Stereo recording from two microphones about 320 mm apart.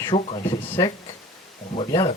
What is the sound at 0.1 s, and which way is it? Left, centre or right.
Speech, centre.